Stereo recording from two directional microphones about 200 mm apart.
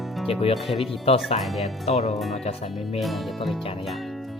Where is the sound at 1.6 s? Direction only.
30° left (ahead or behind).